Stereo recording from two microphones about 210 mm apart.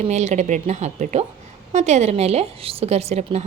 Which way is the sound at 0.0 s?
35° right (ahead or behind).